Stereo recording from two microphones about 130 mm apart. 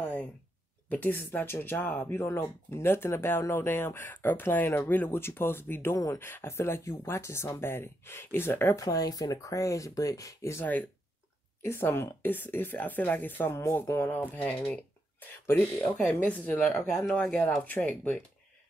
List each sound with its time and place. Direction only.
0.0 s a sound: 10° left (ahead or behind)
0.8 s speech: 15° left (ahead or behind)
8.8 s speech: 30° left (ahead or behind); by 18.1 s 10° left (ahead or behind)